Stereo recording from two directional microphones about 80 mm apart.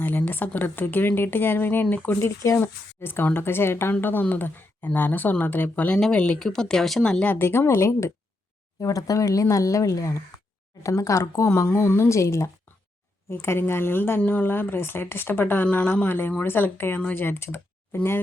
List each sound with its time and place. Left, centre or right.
0.0 s speech: left
7.3 s a woman's voice: left